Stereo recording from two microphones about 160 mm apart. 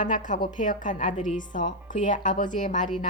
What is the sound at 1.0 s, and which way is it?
Speech, 30° left (ahead or behind).